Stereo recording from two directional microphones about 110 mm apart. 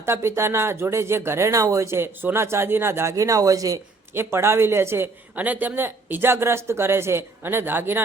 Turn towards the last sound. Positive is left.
turn(degrees=-20)  # may be behind; listen again after turning